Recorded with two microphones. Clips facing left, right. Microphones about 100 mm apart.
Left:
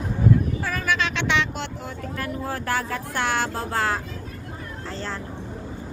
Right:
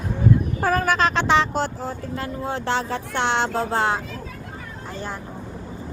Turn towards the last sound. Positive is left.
turn(degrees=-20)  # may be behind; listen again after turning